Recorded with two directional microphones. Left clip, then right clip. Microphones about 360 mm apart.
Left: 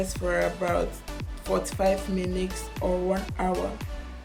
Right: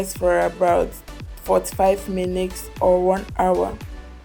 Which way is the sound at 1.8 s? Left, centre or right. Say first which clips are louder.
Right 6 dB; centre.